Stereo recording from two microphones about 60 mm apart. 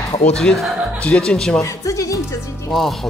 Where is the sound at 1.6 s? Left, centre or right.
Left.